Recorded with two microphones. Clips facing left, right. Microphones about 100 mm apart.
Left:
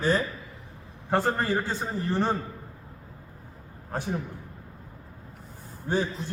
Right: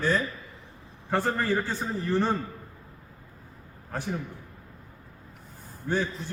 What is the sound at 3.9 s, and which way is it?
Speech, 20° left (ahead or behind).